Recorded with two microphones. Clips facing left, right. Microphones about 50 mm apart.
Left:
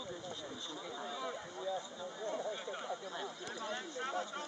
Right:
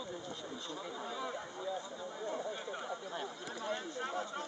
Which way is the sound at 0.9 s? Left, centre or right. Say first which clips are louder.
Even; right.